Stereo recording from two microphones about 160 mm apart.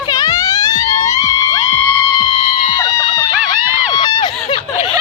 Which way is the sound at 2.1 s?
40° left (ahead or behind).